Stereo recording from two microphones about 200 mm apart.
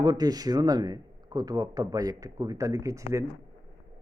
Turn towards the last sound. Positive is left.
turn(degrees=-15)  # may be behind; listen again after turning